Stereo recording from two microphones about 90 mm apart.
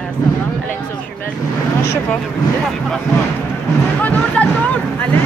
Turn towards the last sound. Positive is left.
turn(degrees=15)  # may be behind; listen again after turning